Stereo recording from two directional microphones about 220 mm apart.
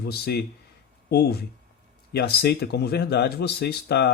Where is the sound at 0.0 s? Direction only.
45° left (ahead or behind).